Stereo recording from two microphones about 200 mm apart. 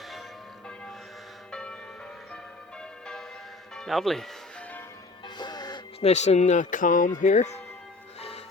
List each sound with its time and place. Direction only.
3.8 s speech: centre (ahead or behind)
5.4 s music: 20° left (ahead or behind)
6.0 s speech: 35° left (ahead or behind)